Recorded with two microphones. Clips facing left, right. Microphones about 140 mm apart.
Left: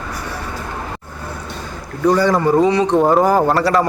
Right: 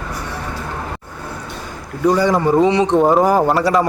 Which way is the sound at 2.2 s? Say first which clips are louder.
Even; 15° right (ahead or behind).